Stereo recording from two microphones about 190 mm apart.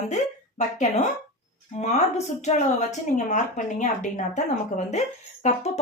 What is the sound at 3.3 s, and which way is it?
A woman's voice, 40° left (ahead or behind).